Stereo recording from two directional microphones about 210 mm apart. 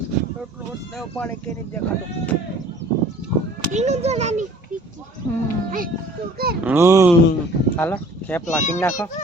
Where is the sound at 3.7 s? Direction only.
30° right (ahead or behind).